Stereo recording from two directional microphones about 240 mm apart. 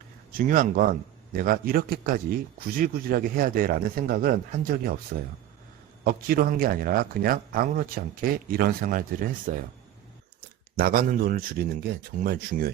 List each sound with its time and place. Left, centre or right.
0.3 s speech: right
6.1 s speech: right
10.8 s speech: right